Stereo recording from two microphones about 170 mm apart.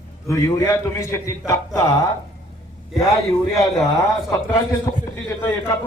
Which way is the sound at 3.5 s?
20° left (ahead or behind).